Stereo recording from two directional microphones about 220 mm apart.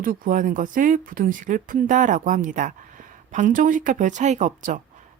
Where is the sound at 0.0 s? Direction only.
40° right (ahead or behind).